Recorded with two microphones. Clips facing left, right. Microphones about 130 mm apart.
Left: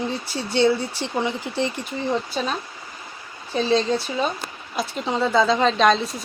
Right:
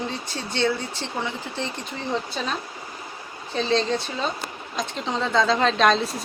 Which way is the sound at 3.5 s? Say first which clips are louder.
Left 3 dB; 10° left (ahead or behind).